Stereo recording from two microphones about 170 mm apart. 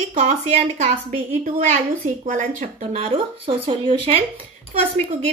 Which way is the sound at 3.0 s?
35° right (ahead or behind).